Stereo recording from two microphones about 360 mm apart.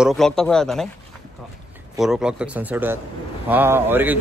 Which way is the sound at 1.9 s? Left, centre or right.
Centre.